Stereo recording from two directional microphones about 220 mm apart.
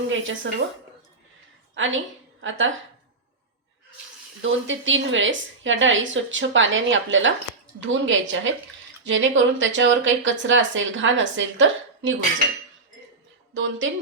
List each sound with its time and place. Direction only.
0.1 s speech: 60° right (ahead or behind)
1.7 s a woman's voice: 60° right (ahead or behind)
4.4 s speech: 60° right (ahead or behind)
13.5 s a woman's voice: 60° right (ahead or behind)